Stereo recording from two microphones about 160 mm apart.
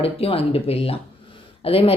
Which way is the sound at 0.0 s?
35° left (ahead or behind).